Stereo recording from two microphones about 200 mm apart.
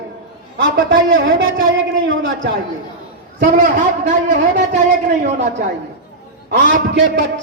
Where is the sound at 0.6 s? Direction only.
65° right (ahead or behind).